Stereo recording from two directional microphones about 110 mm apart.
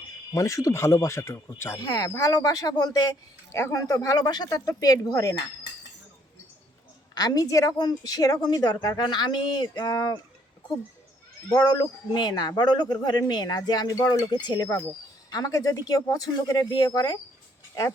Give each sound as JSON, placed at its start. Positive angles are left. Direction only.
{"t": 0.3, "sound": "speech", "side_deg": 30}
{"t": 7.1, "sound": "speech", "side_deg": 35}
{"t": 11.4, "sound": "speech", "side_deg": 35}